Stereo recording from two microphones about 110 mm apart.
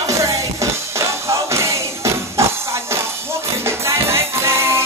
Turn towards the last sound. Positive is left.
turn(degrees=-25)  # may be behind; listen again after turning